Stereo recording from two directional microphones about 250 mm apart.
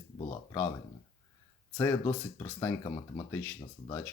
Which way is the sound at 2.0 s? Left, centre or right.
Centre.